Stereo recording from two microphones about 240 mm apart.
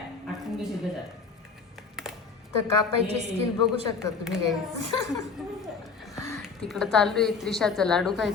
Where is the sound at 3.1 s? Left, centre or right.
Right.